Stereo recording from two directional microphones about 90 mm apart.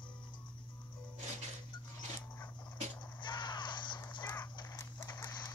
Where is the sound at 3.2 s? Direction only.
55° left (ahead or behind).